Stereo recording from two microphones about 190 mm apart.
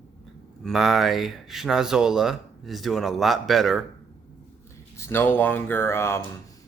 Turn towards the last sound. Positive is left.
turn(degrees=15)  # may be behind; listen again after turning